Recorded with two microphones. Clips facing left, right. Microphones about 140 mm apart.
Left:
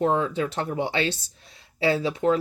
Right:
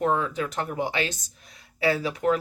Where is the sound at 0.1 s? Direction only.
30° left (ahead or behind).